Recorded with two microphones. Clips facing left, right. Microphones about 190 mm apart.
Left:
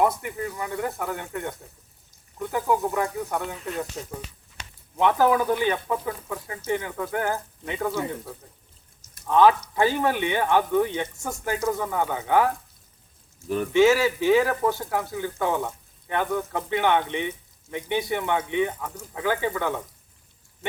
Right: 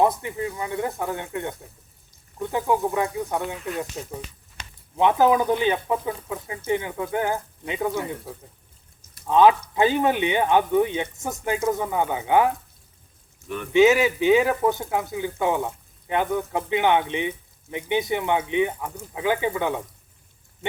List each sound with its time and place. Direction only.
0.2 s speech: 20° right (ahead or behind)
4.9 s speech: 20° right (ahead or behind)
9.2 s speech: 15° right (ahead or behind)
13.7 s speech: 20° right (ahead or behind)